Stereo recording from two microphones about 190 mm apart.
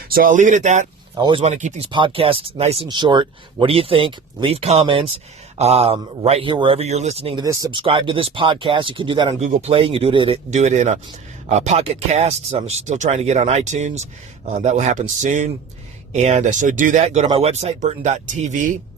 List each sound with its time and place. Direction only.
0.1 s speech: 45° right (ahead or behind)
1.1 s speech: 25° right (ahead or behind); by 1.9 s 40° right (ahead or behind)
1.9 s speech: 25° right (ahead or behind)
7.4 s speech: 20° right (ahead or behind)
9.4 s speech: 35° right (ahead or behind)